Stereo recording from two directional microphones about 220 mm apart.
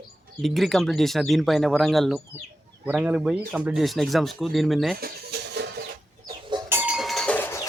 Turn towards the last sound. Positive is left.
turn(degrees=10)  # may be behind; listen again after turning